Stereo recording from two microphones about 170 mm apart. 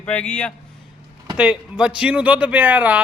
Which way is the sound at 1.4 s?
5° right (ahead or behind).